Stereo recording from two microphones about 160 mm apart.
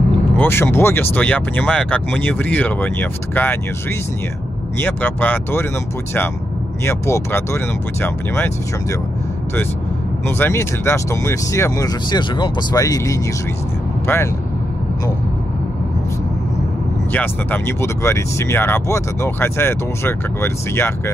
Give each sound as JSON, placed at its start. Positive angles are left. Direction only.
{"t": 0.4, "sound": "speech", "side_deg": 15}
{"t": 4.7, "sound": "speech", "side_deg": 10}
{"t": 6.8, "sound": "speech", "side_deg": 15}
{"t": 10.2, "sound": "speech", "side_deg": 15}
{"t": 17.1, "sound": "speech", "side_deg": 10}